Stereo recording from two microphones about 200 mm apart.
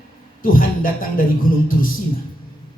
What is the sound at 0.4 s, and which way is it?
Speech, 45° left (ahead or behind).